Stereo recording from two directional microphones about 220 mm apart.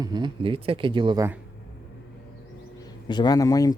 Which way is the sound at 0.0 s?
20° right (ahead or behind).